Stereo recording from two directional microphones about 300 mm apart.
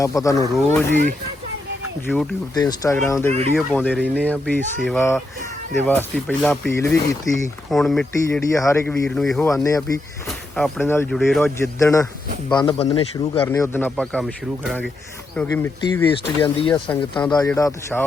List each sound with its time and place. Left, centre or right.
0.0 s speech: centre
2.0 s speech: centre
13.4 s speech: centre